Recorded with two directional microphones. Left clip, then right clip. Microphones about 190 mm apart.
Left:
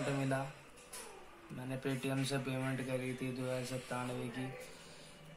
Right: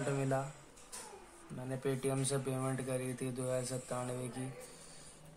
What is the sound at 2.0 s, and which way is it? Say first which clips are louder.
A man's voice: right 2 dB; 30° right (ahead or behind).